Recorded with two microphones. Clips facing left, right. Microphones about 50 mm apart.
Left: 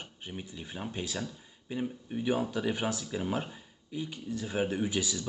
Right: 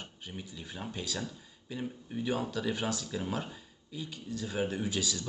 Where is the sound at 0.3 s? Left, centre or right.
Left.